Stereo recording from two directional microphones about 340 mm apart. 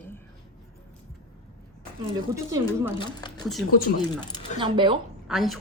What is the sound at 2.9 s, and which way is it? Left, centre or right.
Speech, centre.